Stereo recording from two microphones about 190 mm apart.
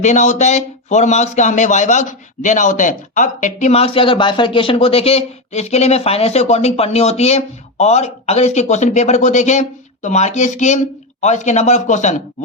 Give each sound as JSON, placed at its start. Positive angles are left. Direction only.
{"t": 0.0, "sound": "speech", "side_deg": 40}